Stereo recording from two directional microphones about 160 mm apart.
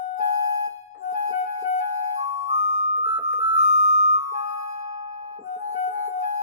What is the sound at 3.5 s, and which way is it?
Music, 50° right (ahead or behind).